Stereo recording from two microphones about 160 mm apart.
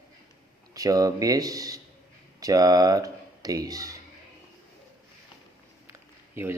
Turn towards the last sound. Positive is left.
turn(degrees=-15)  # may be behind; listen again after turning